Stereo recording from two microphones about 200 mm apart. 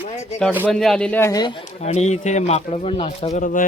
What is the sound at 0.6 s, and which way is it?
Speech, centre (ahead or behind).